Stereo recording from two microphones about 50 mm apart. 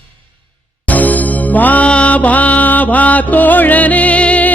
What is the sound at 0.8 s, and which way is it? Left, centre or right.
Music, left.